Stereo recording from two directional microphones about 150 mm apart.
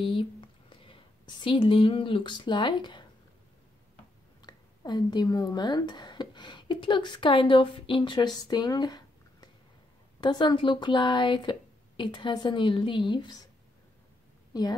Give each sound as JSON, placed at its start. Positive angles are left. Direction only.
{"t": 0.0, "sound": "speech", "side_deg": 35}
{"t": 4.4, "sound": "speech", "side_deg": 30}
{"t": 8.4, "sound": "a sound", "side_deg": 25}
{"t": 10.2, "sound": "a woman's voice", "side_deg": 30}
{"t": 14.5, "sound": "a woman's voice", "side_deg": 25}